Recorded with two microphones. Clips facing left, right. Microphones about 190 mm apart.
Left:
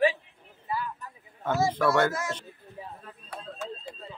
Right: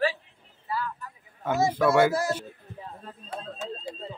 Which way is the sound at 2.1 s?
35° right (ahead or behind).